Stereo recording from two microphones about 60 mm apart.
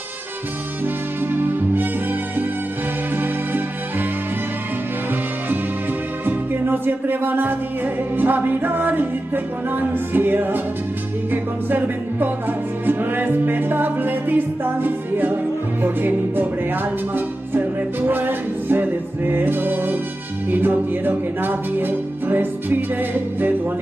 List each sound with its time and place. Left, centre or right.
1.2 s music: right
6.2 s music: right
11.7 s music: right